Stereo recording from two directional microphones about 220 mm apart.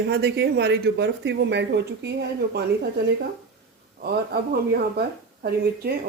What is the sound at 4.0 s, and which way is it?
Speech, 45° right (ahead or behind).